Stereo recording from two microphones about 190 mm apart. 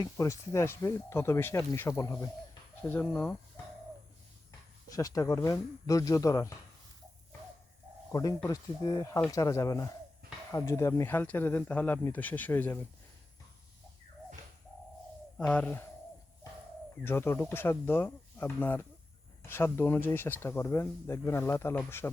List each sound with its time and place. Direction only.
0.0 s speech: 15° left (ahead or behind)
4.9 s speech: 20° left (ahead or behind)
8.1 s speech: 20° left (ahead or behind)
15.4 s speech: 5° left (ahead or behind)
17.0 s speech: 10° left (ahead or behind)